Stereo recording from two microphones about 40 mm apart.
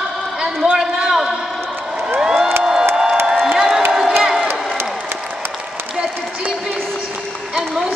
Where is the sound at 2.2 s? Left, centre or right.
Centre.